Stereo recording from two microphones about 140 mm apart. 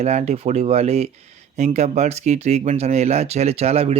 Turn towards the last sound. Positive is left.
turn(degrees=-50)  # may be behind; listen again after turning